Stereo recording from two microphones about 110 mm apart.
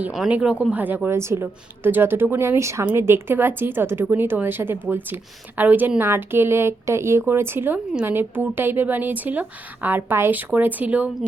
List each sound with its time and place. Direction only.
0.1 s a woman's voice: 10° right (ahead or behind)